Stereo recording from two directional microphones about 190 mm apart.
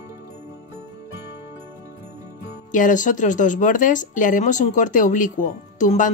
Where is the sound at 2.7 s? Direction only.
45° left (ahead or behind).